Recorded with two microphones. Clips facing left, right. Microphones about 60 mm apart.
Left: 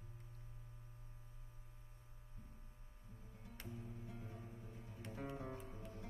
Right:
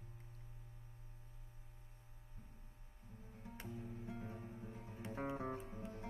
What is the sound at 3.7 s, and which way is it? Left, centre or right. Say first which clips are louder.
Music: right 3 dB; right.